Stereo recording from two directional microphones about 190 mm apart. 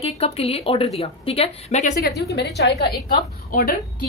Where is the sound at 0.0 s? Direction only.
30° left (ahead or behind).